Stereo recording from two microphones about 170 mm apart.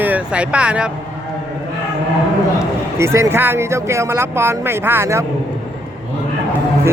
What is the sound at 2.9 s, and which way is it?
Speech, 15° right (ahead or behind).